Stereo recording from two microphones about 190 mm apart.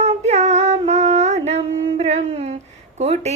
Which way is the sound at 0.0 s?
35° right (ahead or behind).